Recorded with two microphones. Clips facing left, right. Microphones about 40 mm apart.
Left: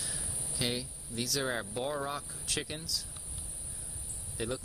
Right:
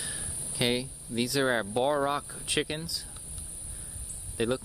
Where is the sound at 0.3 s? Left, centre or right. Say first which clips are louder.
Even; centre.